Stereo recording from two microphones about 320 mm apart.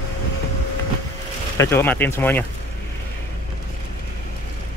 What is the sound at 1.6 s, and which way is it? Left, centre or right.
Speech, centre.